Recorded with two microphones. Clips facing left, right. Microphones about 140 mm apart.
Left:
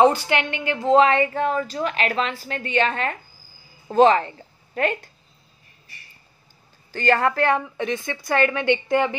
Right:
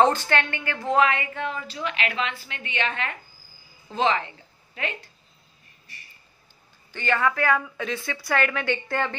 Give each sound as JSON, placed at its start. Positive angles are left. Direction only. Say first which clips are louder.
{"t": 0.0, "sound": "a woman's voice", "louder": "left 3 dB", "side_deg": 10}
{"t": 6.9, "sound": "a woman's voice", "louder": "left 4 dB", "side_deg": 40}